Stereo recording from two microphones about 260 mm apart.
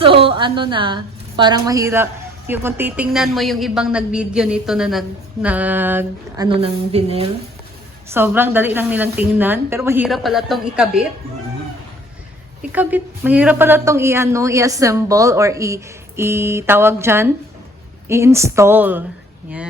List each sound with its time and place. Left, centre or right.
0.0 s a woman's voice: right
8.1 s speech: centre
12.7 s speech: centre